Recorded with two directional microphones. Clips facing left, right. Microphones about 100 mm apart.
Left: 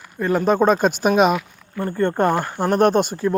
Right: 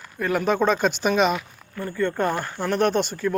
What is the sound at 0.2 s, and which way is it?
Speech, 30° left (ahead or behind).